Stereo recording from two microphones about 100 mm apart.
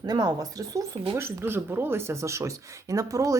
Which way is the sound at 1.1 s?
25° right (ahead or behind).